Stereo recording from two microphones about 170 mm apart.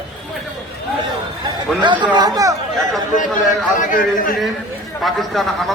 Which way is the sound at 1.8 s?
25° right (ahead or behind).